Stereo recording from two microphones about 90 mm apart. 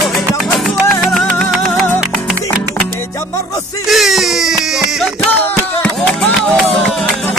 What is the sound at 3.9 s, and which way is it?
Music, centre (ahead or behind).